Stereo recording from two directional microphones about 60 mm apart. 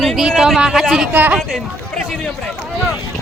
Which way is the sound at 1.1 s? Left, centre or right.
Right.